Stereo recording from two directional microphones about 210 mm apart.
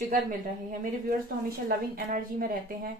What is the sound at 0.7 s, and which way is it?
A woman's voice, 45° right (ahead or behind).